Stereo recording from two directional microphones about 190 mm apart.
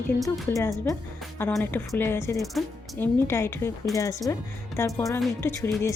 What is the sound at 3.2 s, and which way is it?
Speech, 15° left (ahead or behind).